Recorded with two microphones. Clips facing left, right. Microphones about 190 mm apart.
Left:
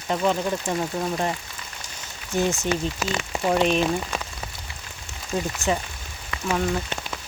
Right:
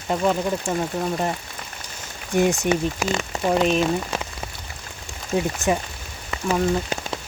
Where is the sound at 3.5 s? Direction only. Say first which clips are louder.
Right 1 dB; centre (ahead or behind).